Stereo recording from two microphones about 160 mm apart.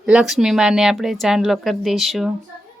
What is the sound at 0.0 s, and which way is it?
A woman's voice, 5° right (ahead or behind).